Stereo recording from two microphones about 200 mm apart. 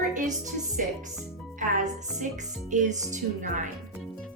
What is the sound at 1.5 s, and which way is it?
Speech, 40° right (ahead or behind).